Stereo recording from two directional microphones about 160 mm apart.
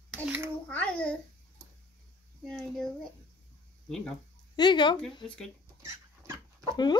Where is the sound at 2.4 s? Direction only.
Centre (ahead or behind).